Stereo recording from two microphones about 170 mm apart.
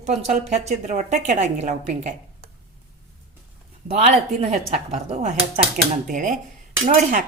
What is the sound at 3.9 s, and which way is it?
A woman's voice, 40° right (ahead or behind).